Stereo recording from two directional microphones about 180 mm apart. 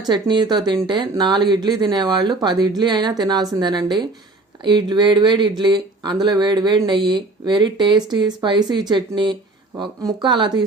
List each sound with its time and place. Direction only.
0.1 s speech: 25° right (ahead or behind)